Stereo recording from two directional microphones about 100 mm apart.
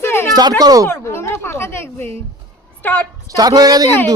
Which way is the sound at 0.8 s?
25° left (ahead or behind).